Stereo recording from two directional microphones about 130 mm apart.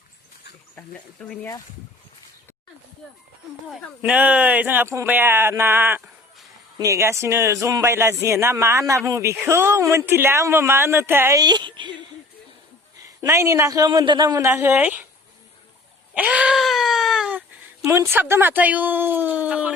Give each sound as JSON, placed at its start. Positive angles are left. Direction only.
{"t": 0.8, "sound": "speech", "side_deg": 10}
{"t": 3.7, "sound": "a man's voice", "side_deg": -5}
{"t": 13.0, "sound": "a man's voice", "side_deg": -20}
{"t": 14.4, "sound": "speech", "side_deg": -15}
{"t": 16.1, "sound": "wail", "side_deg": -10}
{"t": 17.8, "sound": "speech", "side_deg": -20}